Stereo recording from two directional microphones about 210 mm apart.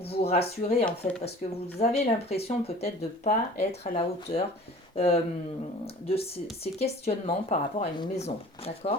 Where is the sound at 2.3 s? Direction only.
30° left (ahead or behind).